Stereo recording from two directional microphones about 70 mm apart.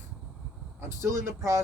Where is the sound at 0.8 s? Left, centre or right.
Right.